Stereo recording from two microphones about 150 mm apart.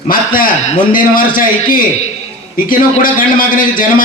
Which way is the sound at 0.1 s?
70° left (ahead or behind).